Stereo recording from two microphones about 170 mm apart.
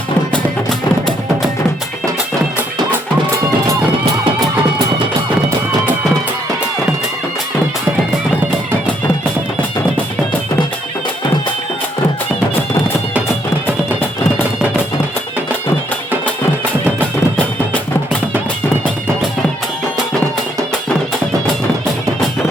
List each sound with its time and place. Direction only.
0.3 s music: 5° left (ahead or behind)